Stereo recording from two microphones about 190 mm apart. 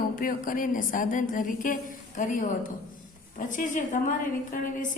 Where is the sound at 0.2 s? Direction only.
45° left (ahead or behind).